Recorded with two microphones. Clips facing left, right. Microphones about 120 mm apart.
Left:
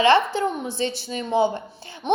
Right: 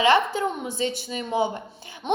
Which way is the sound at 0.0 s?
15° right (ahead or behind).